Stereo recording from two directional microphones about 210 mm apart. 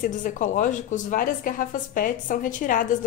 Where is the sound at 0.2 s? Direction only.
40° left (ahead or behind).